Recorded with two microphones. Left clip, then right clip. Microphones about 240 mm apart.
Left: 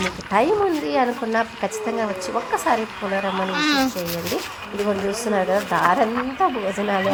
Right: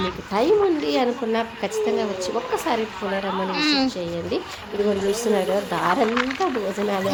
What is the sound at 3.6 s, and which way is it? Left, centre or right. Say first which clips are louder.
Speech: left 1 dB; centre.